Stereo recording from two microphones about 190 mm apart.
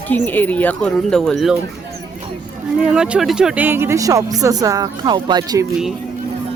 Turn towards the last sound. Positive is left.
turn(degrees=-20)  # may be behind; listen again after turning